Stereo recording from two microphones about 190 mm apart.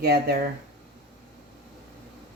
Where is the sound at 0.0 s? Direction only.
55° right (ahead or behind).